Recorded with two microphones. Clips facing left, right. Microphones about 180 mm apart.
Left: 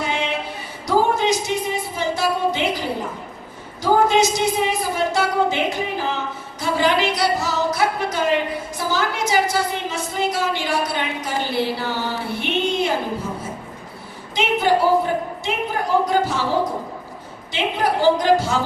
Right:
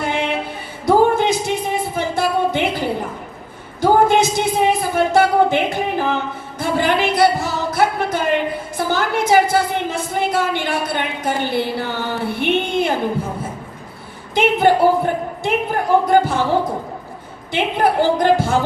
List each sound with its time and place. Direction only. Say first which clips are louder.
0.0 s a sound: right 3 dB; 55° right (ahead or behind)
0.9 s music: right 4 dB; 55° right (ahead or behind)
3.8 s a woman's voice: right 3 dB; 55° right (ahead or behind)
14.3 s a woman's voice: right 4 dB; 55° right (ahead or behind)
17.5 s a woman's voice: right 4 dB; 55° right (ahead or behind)